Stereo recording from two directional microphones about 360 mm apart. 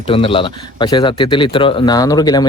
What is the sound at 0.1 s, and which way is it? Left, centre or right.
Speech, centre.